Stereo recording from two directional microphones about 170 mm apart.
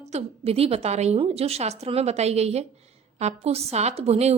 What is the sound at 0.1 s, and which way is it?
A woman's voice, 40° right (ahead or behind).